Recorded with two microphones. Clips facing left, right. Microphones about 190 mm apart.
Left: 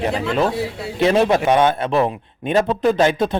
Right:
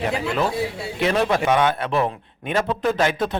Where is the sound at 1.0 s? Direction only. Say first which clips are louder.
Left 4 dB; 25° left (ahead or behind).